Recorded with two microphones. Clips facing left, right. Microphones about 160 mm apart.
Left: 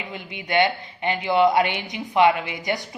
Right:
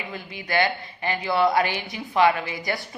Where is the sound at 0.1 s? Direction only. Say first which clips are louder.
Left 3 dB; 20° left (ahead or behind).